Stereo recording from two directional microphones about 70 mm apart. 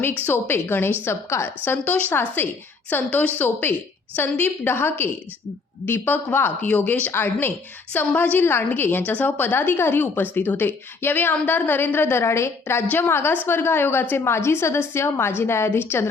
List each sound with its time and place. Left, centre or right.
0.0 s a woman's voice: left
1.7 s a woman's voice: left
7.9 s a woman's voice: left